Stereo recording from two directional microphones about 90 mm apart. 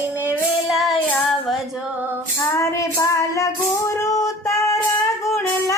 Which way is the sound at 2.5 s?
35° left (ahead or behind).